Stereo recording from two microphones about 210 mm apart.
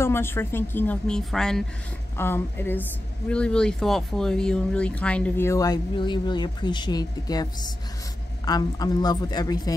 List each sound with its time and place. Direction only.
0.0 s a woman's voice: 10° left (ahead or behind)